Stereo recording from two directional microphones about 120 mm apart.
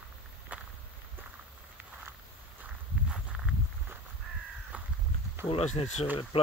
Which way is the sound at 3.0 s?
5° right (ahead or behind).